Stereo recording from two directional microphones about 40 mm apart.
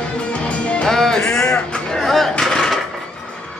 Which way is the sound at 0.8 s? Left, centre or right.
Centre.